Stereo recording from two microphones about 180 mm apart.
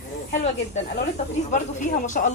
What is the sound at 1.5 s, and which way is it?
Speech, 45° left (ahead or behind).